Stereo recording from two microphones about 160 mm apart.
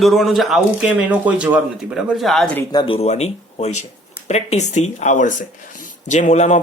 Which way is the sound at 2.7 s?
25° left (ahead or behind).